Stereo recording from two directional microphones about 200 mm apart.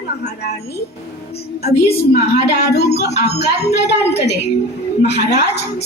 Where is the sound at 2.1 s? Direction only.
55° left (ahead or behind).